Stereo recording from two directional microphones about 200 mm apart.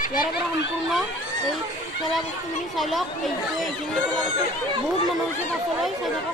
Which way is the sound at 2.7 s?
Centre (ahead or behind).